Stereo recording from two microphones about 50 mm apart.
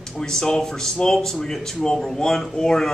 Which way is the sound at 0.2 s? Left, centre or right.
Centre.